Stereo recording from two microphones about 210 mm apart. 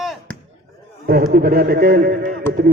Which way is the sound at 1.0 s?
45° right (ahead or behind).